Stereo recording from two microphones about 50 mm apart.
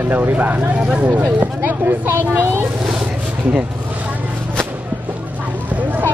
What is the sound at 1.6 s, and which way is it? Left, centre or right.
Speech, right.